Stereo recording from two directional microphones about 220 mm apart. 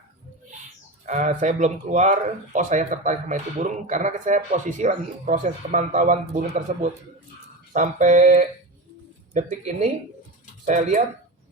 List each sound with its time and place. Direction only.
1.0 s speech: 35° right (ahead or behind)